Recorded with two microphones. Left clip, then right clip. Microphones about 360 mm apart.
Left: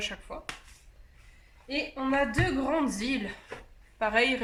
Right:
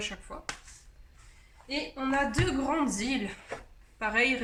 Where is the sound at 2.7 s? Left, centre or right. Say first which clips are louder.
Left 1 dB; centre.